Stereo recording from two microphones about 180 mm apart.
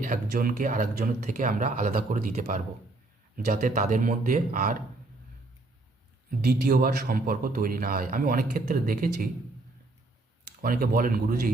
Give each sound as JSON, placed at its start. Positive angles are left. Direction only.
{"t": 0.0, "sound": "speech", "side_deg": -50}
{"t": 2.1, "sound": "speech", "side_deg": -40}
{"t": 6.4, "sound": "speech", "side_deg": -60}
{"t": 10.6, "sound": "speech", "side_deg": -55}